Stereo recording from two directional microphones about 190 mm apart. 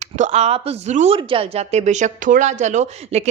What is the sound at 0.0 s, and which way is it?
A woman's voice, 40° right (ahead or behind).